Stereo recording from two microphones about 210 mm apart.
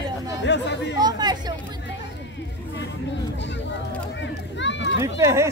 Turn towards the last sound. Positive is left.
turn(degrees=-15)  # may be behind; listen again after turning